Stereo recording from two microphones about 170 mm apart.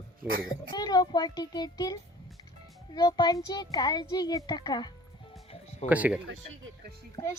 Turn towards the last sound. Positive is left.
turn(degrees=35)  # may be behind; listen again after turning